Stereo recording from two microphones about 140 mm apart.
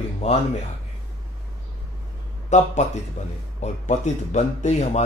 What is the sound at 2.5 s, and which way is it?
Speech, 55° left (ahead or behind).